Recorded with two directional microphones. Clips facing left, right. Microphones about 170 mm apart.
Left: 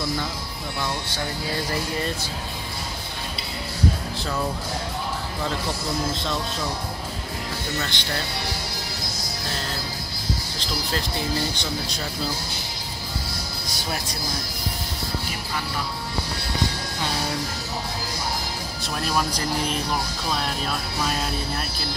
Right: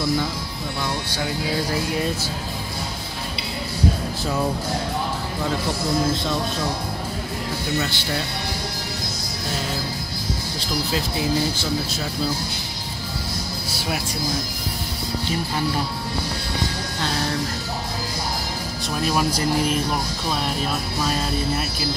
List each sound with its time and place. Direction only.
7.8 s speech: 5° right (ahead or behind)
10.6 s speech: 5° right (ahead or behind)
13.7 s speech: 10° right (ahead or behind)
18.9 s speech: 5° right (ahead or behind)